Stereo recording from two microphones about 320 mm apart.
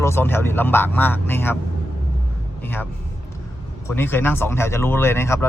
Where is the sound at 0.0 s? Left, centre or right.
Centre.